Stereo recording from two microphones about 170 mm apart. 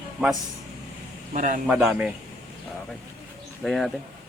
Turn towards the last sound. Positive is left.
turn(degrees=0)  # may be behind; listen again after turning